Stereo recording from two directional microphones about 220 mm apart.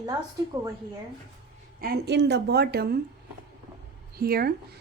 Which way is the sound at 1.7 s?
45° right (ahead or behind).